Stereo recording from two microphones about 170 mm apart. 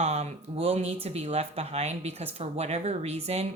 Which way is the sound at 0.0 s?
40° right (ahead or behind).